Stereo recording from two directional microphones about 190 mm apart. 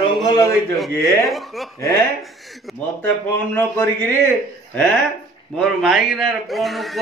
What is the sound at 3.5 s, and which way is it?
Speech, 10° left (ahead or behind).